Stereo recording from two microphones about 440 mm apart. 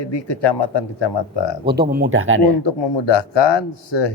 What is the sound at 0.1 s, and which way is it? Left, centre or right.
Speech, left.